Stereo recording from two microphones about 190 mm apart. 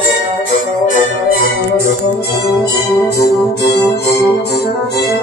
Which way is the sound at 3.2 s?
60° left (ahead or behind).